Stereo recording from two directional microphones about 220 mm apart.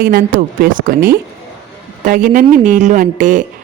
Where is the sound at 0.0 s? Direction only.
45° right (ahead or behind).